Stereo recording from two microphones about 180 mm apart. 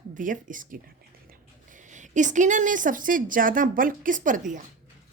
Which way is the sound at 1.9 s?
45° right (ahead or behind).